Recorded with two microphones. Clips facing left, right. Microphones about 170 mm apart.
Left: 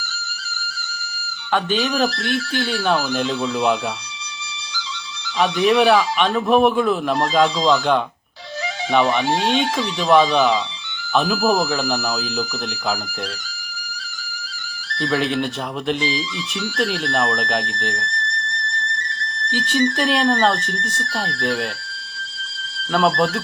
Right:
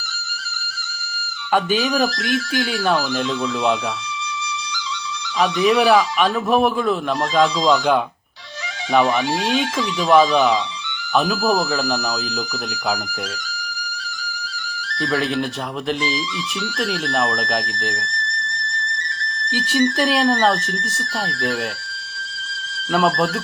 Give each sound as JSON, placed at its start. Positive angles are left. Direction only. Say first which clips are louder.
{"t": 1.5, "sound": "speech", "louder": "right 1 dB", "side_deg": -5}
{"t": 2.0, "sound": "speech", "louder": "right 1 dB", "side_deg": -40}
{"t": 3.1, "sound": "speech", "louder": "even", "side_deg": 0}
{"t": 5.4, "sound": "speech", "louder": "even", "side_deg": 0}
{"t": 9.2, "sound": "speech", "louder": "left 2 dB", "side_deg": 40}
{"t": 9.5, "sound": "speech", "louder": "left 1 dB", "side_deg": 0}
{"t": 15.0, "sound": "speech", "louder": "left 1 dB", "side_deg": 0}
{"t": 19.5, "sound": "speech", "louder": "right 1 dB", "side_deg": -10}
{"t": 22.9, "sound": "speech", "louder": "even", "side_deg": 0}